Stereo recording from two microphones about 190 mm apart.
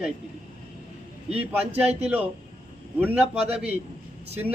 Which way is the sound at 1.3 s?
35° right (ahead or behind).